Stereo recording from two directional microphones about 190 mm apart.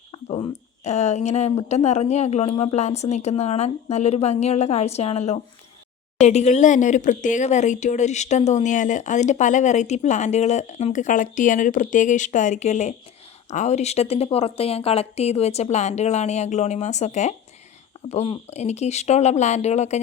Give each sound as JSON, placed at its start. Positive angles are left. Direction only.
{"t": 0.1, "sound": "frog", "side_deg": 25}
{"t": 0.9, "sound": "speech", "side_deg": 35}